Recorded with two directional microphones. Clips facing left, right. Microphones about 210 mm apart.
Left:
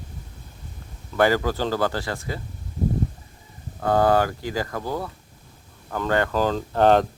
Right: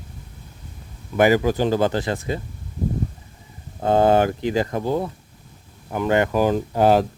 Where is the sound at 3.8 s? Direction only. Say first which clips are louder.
Right 3 dB; 20° right (ahead or behind).